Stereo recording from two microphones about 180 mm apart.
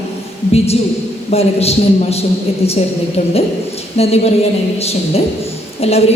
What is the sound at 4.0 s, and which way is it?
A woman's voice, 35° left (ahead or behind).